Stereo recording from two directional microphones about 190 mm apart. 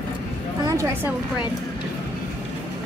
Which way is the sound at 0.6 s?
15° right (ahead or behind).